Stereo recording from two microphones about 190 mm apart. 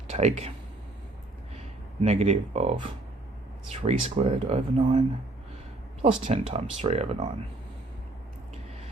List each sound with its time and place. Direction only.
0.1 s speech: 35° right (ahead or behind)
2.0 s speech: 35° right (ahead or behind)